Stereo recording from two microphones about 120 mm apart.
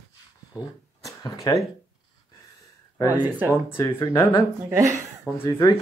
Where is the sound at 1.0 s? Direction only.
30° left (ahead or behind).